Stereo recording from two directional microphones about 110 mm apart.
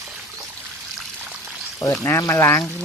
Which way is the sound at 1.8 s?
30° left (ahead or behind).